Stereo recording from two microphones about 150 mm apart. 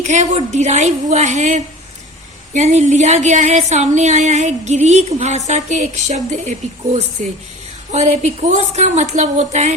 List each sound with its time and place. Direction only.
0.0 s a woman's voice: 50° right (ahead or behind)